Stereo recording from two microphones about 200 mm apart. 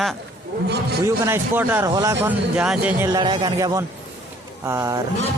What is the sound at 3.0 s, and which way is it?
A man's voice, 20° right (ahead or behind).